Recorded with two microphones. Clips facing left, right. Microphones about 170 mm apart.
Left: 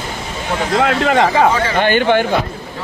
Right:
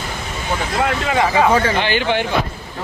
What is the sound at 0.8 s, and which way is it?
A man's voice, 60° left (ahead or behind).